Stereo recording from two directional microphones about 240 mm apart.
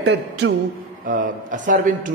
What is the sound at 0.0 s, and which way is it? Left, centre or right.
Speech, right.